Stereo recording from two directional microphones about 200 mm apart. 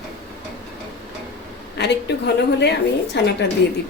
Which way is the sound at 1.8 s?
55° left (ahead or behind).